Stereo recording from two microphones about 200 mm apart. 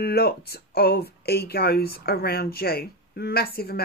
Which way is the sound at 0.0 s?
50° left (ahead or behind).